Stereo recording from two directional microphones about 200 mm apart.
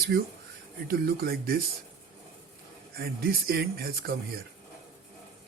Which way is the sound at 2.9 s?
50° right (ahead or behind).